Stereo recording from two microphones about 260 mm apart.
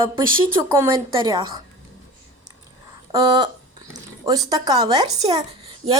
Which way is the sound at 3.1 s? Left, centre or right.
Centre.